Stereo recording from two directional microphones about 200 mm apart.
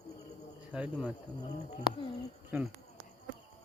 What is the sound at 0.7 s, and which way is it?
Speech, 5° right (ahead or behind).